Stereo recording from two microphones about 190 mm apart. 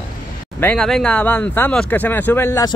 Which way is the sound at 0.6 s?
5° left (ahead or behind).